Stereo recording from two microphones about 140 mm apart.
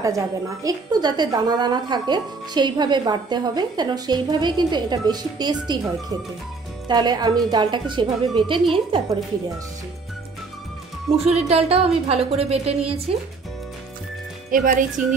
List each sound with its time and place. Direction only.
0.0 s a woman's voice: 25° right (ahead or behind)
11.3 s a woman's voice: 45° right (ahead or behind)
14.5 s speech: 75° right (ahead or behind)